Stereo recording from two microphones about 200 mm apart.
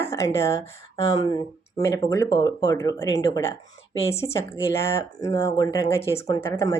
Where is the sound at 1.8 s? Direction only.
15° left (ahead or behind).